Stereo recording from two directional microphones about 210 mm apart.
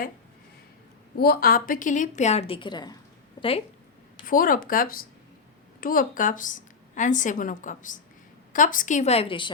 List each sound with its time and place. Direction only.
1.1 s a woman's voice: 45° left (ahead or behind); by 3.0 s 20° left (ahead or behind)
4.3 s a woman's voice: 40° left (ahead or behind); by 9.5 s 25° left (ahead or behind)